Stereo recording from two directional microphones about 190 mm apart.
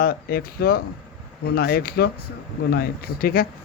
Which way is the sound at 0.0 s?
50° left (ahead or behind).